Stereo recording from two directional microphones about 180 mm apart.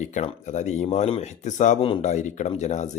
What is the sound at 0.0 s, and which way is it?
Speech, 40° left (ahead or behind).